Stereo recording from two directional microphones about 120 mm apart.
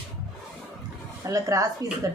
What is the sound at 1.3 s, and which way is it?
Speech, 25° right (ahead or behind).